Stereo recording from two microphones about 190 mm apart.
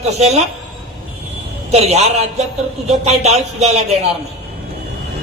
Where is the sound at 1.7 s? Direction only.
35° right (ahead or behind).